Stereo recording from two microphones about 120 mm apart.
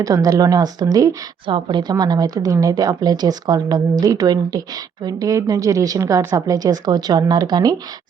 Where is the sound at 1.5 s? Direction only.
45° right (ahead or behind).